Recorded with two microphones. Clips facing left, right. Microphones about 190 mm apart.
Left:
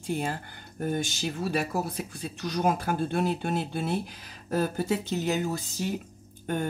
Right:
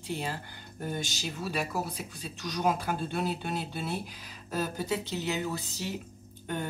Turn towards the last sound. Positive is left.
turn(degrees=50)  # may be behind; listen again after turning